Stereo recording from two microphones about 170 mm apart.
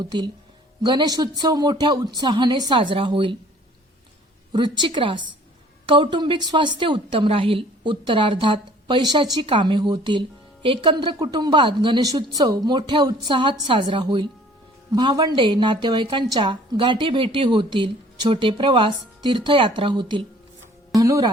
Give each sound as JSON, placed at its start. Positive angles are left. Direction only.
{"t": 0.0, "sound": "a woman's voice", "side_deg": -25}
{"t": 4.5, "sound": "a woman's voice", "side_deg": -25}